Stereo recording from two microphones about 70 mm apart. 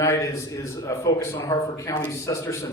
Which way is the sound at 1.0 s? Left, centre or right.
Left.